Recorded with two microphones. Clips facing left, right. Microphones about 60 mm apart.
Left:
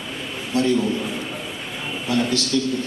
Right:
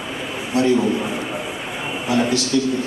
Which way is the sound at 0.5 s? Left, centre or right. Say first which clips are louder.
Right 3 dB; centre.